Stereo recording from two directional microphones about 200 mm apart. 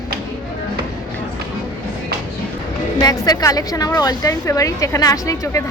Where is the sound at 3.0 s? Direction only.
20° left (ahead or behind).